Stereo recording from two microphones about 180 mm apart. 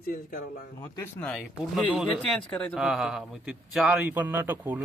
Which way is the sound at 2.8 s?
5° right (ahead or behind).